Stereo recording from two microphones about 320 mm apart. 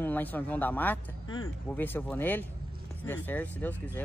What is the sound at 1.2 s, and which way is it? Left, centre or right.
Speech, left.